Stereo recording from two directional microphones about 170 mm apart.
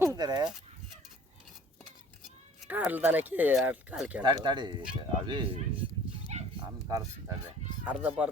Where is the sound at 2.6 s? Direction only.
10° right (ahead or behind).